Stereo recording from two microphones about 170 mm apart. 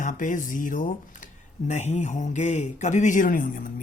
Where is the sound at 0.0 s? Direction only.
50° left (ahead or behind).